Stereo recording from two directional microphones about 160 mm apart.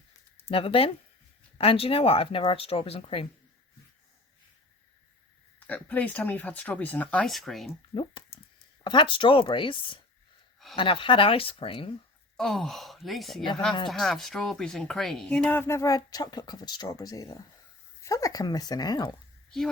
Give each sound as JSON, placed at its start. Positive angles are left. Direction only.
{"t": 0.4, "sound": "speech", "side_deg": 35}
{"t": 5.5, "sound": "speech", "side_deg": 10}
{"t": 8.8, "sound": "speech", "side_deg": 30}
{"t": 12.4, "sound": "speech", "side_deg": 0}